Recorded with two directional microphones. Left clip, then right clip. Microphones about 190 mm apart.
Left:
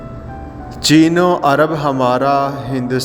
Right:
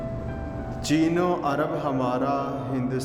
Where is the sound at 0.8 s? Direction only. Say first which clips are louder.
Left 12 dB; 35° left (ahead or behind).